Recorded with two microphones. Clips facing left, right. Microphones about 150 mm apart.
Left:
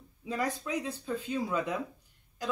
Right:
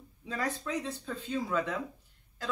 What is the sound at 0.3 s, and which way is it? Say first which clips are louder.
A woman's voice: left 1 dB; 15° left (ahead or behind).